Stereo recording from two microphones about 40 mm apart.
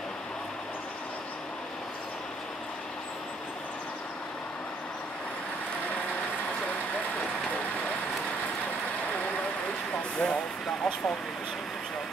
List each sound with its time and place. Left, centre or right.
10.1 s speech: left